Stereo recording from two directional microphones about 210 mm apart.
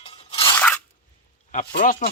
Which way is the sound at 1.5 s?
35° left (ahead or behind).